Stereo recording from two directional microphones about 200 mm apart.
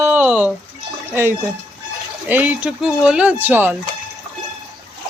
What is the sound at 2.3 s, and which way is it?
Speech, 5° right (ahead or behind).